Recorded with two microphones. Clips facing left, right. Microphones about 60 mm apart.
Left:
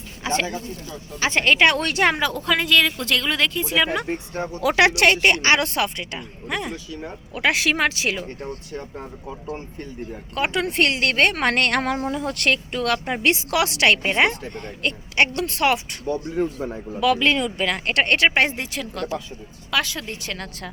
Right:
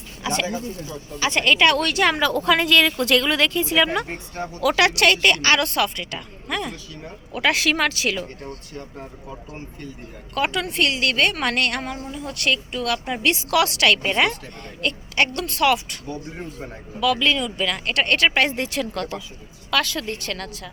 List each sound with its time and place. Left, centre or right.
0.2 s speech: left
2.1 s a woman's voice: centre
2.4 s speech: centre
4.4 s speech: left
10.3 s speech: left
17.0 s speech: left; by 18.6 s centre
18.6 s speech: centre
19.7 s a woman's voice: centre